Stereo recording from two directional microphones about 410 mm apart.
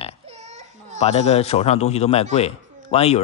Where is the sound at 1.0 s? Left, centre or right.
Centre.